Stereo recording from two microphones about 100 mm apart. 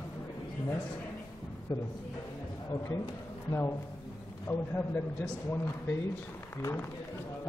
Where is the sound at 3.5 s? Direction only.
30° left (ahead or behind).